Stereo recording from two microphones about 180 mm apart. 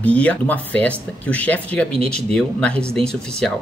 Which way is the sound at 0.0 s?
10° left (ahead or behind).